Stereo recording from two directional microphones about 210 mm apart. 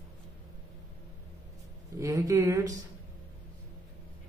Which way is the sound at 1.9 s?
15° right (ahead or behind).